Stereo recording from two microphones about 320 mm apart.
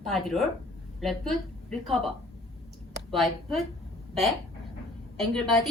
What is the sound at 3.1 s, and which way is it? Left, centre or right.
Speech, centre.